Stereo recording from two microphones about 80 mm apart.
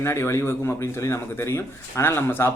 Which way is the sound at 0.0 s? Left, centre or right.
Left.